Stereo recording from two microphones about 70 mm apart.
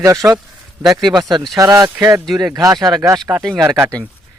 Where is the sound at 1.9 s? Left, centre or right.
Right.